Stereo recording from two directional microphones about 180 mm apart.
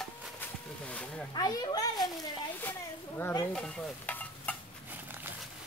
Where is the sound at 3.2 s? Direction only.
10° left (ahead or behind).